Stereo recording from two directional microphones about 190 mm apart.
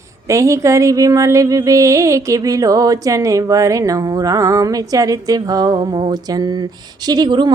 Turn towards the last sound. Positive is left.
turn(degrees=-25)  # may be behind; listen again after turning